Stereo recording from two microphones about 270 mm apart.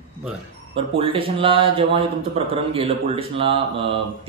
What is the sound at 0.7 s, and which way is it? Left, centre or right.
Speech, centre.